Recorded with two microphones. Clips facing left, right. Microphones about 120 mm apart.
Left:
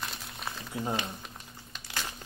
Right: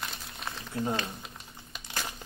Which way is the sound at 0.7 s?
10° left (ahead or behind).